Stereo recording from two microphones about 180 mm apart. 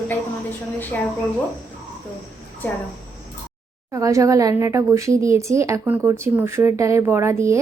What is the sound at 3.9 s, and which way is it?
A woman's voice, 15° right (ahead or behind).